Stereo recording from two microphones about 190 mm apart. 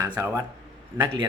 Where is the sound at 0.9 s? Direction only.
20° right (ahead or behind).